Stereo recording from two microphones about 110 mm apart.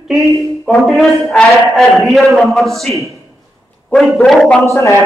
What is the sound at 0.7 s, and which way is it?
A man's voice, centre (ahead or behind).